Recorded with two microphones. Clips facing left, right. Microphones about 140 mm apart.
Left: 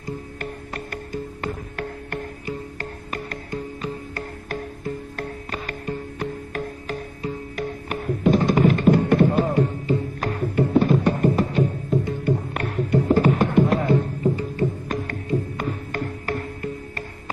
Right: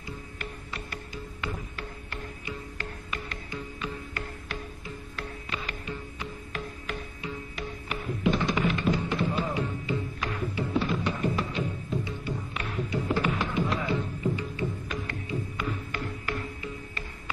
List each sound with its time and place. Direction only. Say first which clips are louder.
0.0 s music: left 8 dB; 45° left (ahead or behind)